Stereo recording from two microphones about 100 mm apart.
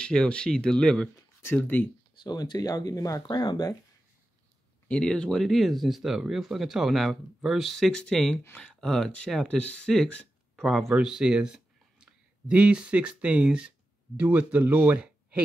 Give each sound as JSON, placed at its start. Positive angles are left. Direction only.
{"t": 0.0, "sound": "speech", "side_deg": 10}
{"t": 1.1, "sound": "speech", "side_deg": 20}
{"t": 2.2, "sound": "speech", "side_deg": 45}
{"t": 4.8, "sound": "speech", "side_deg": 10}